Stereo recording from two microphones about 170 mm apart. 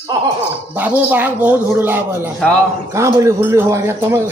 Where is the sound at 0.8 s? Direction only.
10° right (ahead or behind).